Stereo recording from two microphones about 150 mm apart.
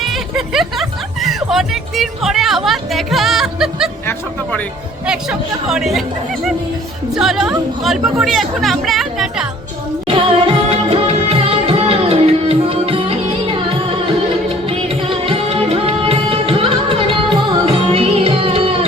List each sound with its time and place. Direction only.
0.0 s speech: centre (ahead or behind)
5.0 s speech: 5° right (ahead or behind)
7.2 s speech: 5° right (ahead or behind)
10.1 s music: 35° right (ahead or behind)
15.3 s music: 40° right (ahead or behind)